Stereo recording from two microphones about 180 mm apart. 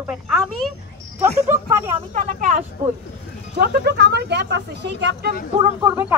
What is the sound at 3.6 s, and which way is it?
Vehicle, 65° right (ahead or behind).